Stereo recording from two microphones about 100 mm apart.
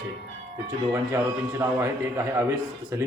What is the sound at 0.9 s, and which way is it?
A man's voice, 25° right (ahead or behind).